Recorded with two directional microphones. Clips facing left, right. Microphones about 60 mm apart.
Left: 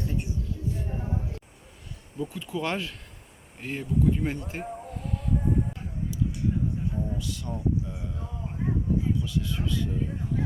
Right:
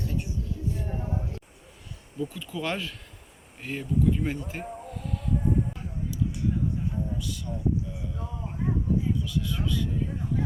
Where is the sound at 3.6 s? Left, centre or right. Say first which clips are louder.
Even; left.